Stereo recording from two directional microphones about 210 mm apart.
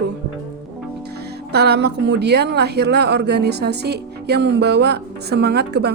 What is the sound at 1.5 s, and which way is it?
A woman's voice, 50° right (ahead or behind).